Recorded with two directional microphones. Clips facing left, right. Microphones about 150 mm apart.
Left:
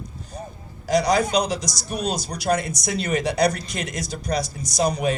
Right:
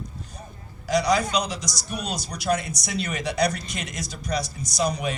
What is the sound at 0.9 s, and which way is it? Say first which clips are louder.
Speech: left 2 dB; 50° left (ahead or behind).